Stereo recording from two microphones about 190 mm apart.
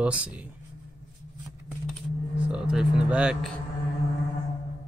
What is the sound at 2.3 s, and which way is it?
Speech, 5° right (ahead or behind).